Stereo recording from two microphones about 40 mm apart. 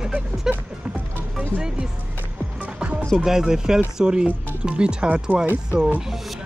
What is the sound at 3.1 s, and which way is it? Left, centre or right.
Speech, centre.